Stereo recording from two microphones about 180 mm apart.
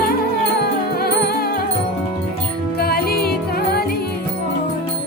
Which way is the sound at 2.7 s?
60° left (ahead or behind).